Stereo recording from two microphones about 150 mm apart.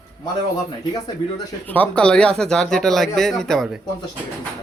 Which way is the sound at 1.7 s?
10° left (ahead or behind).